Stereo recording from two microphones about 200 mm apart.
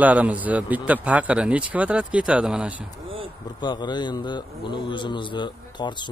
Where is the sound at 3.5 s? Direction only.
20° left (ahead or behind).